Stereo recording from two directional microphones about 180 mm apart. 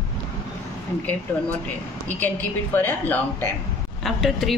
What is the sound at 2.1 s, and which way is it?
A woman's voice, 10° left (ahead or behind).